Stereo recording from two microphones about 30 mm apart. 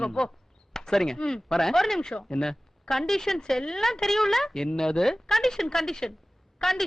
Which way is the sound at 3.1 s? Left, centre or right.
Centre.